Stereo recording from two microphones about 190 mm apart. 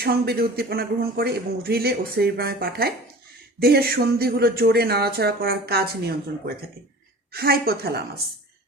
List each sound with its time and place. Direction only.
0.0 s a woman's voice: 55° right (ahead or behind)